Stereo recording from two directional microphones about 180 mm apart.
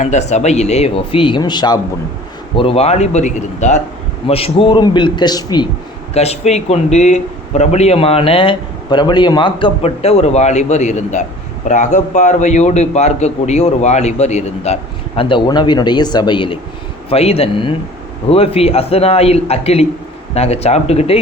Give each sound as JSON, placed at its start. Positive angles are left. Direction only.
{"t": 0.0, "sound": "a man's voice", "side_deg": 40}
{"t": 6.1, "sound": "a man's voice", "side_deg": 35}